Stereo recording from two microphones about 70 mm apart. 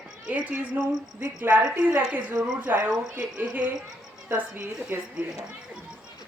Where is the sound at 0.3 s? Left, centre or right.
Centre.